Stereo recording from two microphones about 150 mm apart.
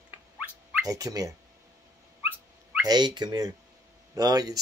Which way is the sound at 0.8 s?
25° right (ahead or behind).